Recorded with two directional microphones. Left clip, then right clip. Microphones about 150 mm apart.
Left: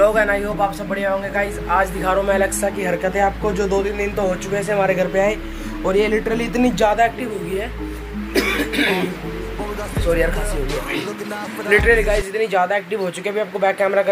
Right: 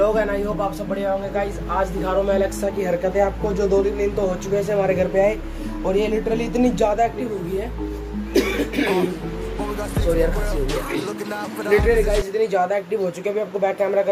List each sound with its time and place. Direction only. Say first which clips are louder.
0.0 s a man's voice: left 4 dB; 5° right (ahead or behind)
8.3 s music: left 1 dB; 20° right (ahead or behind)
11.7 s a man's voice: left 3 dB; centre (ahead or behind)